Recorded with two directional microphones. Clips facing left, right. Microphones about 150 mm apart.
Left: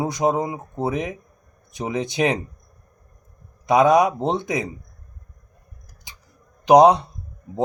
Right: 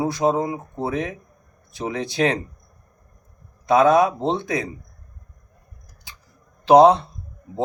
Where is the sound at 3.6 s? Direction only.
15° left (ahead or behind).